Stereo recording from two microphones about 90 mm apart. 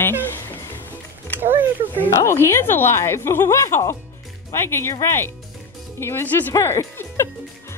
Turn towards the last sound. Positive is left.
turn(degrees=30)  # may be behind; listen again after turning